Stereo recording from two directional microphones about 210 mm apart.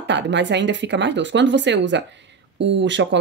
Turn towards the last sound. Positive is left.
turn(degrees=-60)  # may be behind; listen again after turning